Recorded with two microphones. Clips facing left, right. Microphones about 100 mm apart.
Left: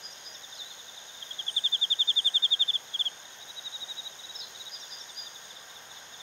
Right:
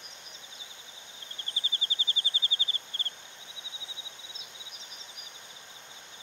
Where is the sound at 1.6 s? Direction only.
30° right (ahead or behind).